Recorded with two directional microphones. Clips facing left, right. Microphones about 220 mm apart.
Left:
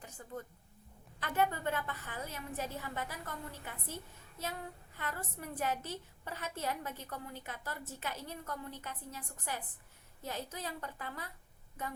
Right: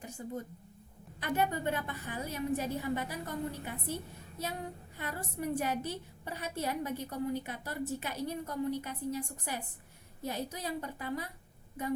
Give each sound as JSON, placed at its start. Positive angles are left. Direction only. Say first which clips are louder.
{"t": 0.2, "sound": "a woman's voice", "louder": "right 5 dB", "side_deg": -20}